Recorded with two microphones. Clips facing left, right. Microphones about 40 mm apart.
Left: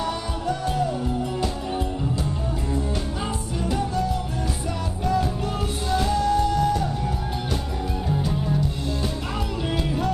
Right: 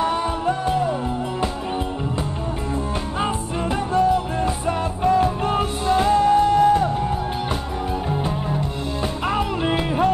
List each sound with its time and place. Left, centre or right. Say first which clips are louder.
0.0 s music: right 6 dB; right
2.7 s music: right 2 dB; right
8.1 s music: right 1 dB; right
9.7 s music: right 5 dB; right